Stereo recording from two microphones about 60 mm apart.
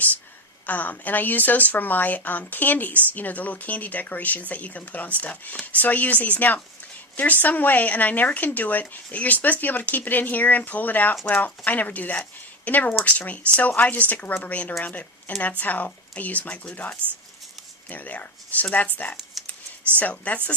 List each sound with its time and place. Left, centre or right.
0.7 s speech: left
17.8 s speech: left
20.0 s speech: left